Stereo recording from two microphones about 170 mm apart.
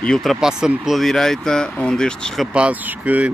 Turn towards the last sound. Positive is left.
turn(degrees=-10)  # may be behind; listen again after turning